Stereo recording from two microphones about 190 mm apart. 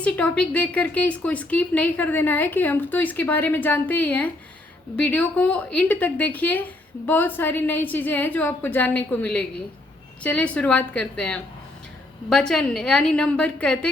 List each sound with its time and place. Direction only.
0.0 s a woman's voice: 5° left (ahead or behind)